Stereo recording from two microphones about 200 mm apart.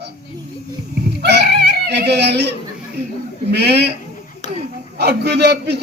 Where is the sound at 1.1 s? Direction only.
55° right (ahead or behind).